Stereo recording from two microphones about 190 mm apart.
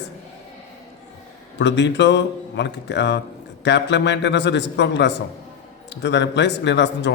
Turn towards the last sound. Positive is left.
turn(degrees=65)  # may be behind; listen again after turning